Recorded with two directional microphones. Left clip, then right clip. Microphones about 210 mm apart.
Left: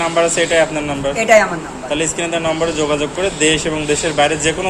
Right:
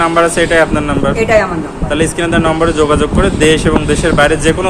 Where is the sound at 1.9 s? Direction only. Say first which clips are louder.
Right 5 dB; 25° right (ahead or behind).